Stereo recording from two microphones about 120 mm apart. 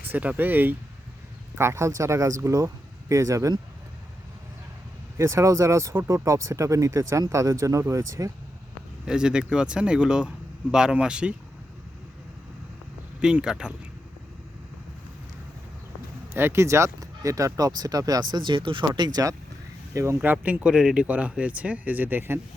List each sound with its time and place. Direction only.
0.1 s speech: 15° right (ahead or behind)
5.1 s speech: 25° right (ahead or behind)
9.0 s speech: 5° right (ahead or behind)
13.2 s speech: 5° right (ahead or behind)
16.3 s speech: 20° right (ahead or behind)
20.2 s speech: 15° right (ahead or behind)